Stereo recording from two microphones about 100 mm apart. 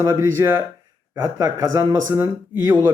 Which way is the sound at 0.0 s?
30° right (ahead or behind).